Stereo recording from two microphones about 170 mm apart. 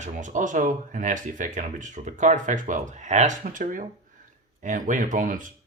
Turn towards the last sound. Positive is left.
turn(degrees=-50)  # may be behind; listen again after turning